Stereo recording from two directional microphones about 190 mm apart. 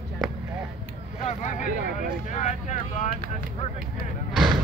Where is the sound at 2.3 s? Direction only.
40° left (ahead or behind).